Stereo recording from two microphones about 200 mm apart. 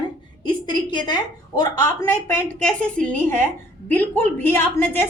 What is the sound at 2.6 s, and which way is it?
A woman's voice, 5° left (ahead or behind).